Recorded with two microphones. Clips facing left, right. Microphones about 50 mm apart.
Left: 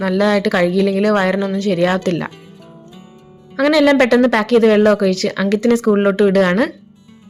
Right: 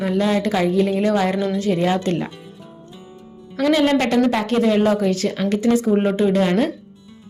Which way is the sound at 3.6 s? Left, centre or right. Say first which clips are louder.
Left 5 dB; left.